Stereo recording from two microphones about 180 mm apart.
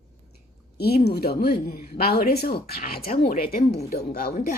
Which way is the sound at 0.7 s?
60° left (ahead or behind).